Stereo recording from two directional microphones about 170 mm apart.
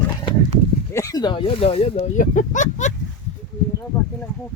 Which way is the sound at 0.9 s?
20° left (ahead or behind).